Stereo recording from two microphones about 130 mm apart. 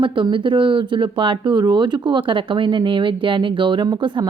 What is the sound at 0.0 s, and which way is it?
Speech, 40° right (ahead or behind).